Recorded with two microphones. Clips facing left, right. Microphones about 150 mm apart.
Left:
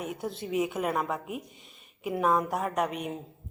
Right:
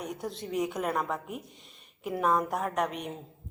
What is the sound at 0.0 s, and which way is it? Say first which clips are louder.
A woman's voice: left 2 dB; 5° left (ahead or behind).